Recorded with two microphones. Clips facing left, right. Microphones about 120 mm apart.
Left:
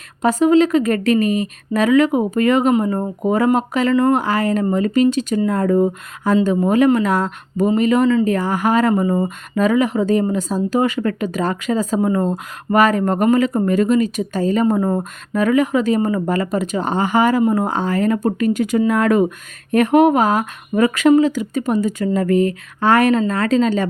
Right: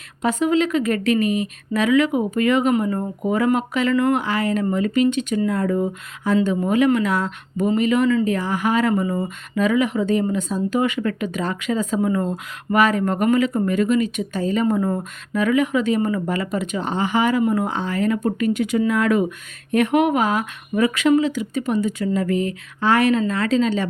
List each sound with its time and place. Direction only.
0.2 s speech: 40° left (ahead or behind)